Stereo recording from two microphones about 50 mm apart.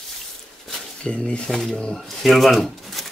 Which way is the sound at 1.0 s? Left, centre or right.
Centre.